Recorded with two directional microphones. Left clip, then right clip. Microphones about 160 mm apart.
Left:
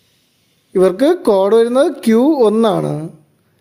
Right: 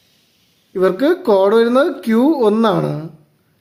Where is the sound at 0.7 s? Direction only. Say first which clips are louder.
Left 3 dB; 40° left (ahead or behind).